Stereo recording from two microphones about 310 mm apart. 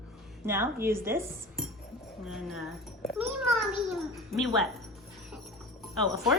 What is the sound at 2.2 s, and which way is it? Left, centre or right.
A child's voice, centre.